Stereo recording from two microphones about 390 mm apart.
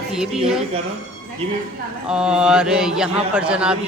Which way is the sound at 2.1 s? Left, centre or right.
Centre.